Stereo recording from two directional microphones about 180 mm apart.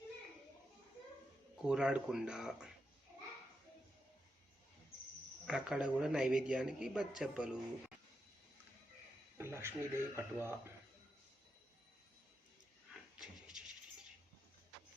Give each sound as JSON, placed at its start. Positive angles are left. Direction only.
{"t": 1.6, "sound": "speech", "side_deg": -5}
{"t": 5.5, "sound": "speech", "side_deg": -5}
{"t": 9.4, "sound": "speech", "side_deg": -15}
{"t": 13.1, "sound": "a sound", "side_deg": -5}